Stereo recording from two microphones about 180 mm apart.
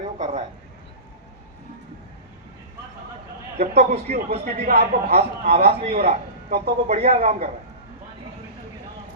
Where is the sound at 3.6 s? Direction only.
35° right (ahead or behind).